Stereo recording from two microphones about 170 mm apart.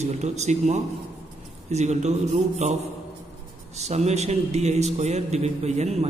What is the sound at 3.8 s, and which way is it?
A man's voice, 40° right (ahead or behind).